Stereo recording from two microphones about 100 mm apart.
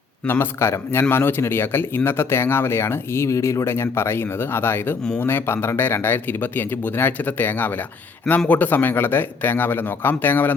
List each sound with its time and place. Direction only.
0.3 s speech: 25° left (ahead or behind)